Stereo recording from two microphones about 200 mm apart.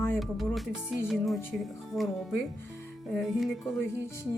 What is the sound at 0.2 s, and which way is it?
Speech, centre (ahead or behind).